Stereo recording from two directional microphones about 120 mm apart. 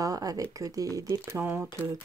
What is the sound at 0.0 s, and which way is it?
Speech, 30° right (ahead or behind).